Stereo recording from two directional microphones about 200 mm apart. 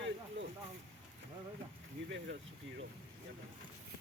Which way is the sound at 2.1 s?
60° right (ahead or behind).